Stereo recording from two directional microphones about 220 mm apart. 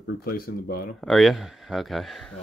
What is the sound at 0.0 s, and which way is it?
Speech, 40° left (ahead or behind).